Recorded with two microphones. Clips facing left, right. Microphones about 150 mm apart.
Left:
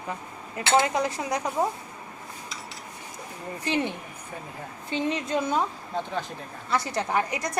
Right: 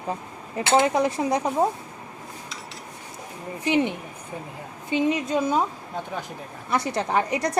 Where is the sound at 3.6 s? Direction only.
15° right (ahead or behind).